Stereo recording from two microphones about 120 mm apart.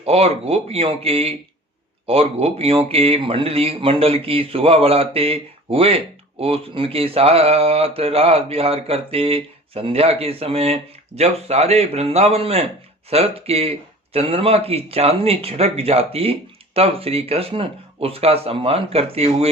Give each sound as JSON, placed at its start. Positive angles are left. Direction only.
{"t": 0.0, "sound": "a man's voice", "side_deg": -55}